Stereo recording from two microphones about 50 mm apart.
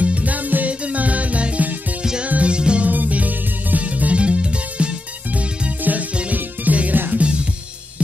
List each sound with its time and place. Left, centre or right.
0.0 s music: right
2.9 s music: right
5.8 s music: right